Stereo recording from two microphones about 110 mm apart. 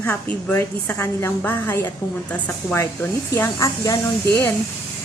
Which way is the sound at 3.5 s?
30° left (ahead or behind).